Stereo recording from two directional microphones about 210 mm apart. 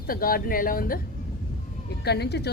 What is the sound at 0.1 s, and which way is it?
Speech, 45° left (ahead or behind).